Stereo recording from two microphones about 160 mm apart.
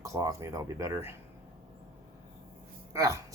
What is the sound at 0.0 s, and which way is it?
Speech, 20° right (ahead or behind).